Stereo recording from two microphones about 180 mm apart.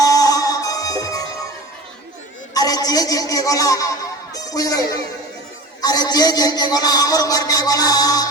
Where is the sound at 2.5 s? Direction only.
20° left (ahead or behind).